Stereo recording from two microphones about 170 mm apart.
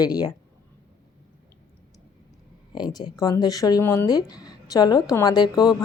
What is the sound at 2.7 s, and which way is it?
Speech, 25° left (ahead or behind).